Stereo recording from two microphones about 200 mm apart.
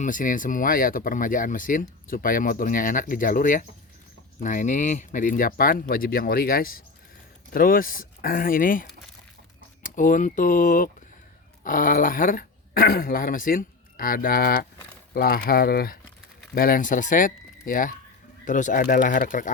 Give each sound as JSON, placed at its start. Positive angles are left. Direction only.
{"t": 0.0, "sound": "speech", "side_deg": 40}